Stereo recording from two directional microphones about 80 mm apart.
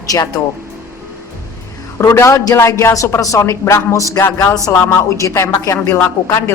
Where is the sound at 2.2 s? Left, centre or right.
Left.